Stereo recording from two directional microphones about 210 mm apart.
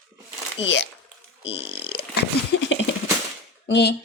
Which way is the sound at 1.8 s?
50° left (ahead or behind).